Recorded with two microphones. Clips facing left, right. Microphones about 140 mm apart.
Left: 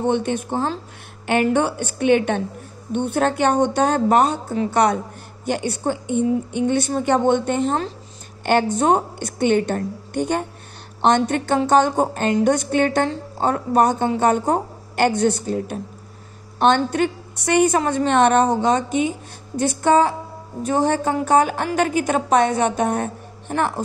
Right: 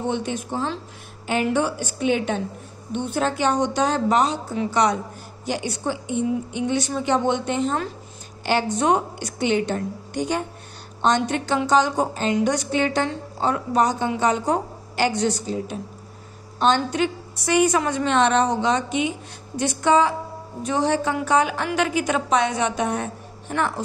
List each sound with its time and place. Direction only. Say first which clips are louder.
0.0 s a woman's voice: left 5 dB; 55° left (ahead or behind)